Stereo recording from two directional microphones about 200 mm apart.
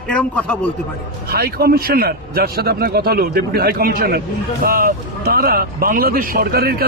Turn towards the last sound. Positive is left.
turn(degrees=-50)  # may be behind; listen again after turning